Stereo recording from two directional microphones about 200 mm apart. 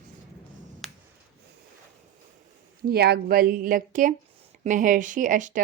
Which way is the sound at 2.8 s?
50° right (ahead or behind).